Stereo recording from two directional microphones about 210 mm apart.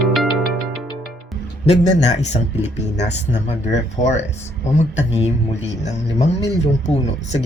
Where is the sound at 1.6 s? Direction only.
30° left (ahead or behind).